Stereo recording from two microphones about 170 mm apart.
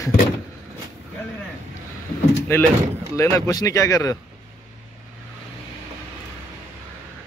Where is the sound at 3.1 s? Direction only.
20° left (ahead or behind).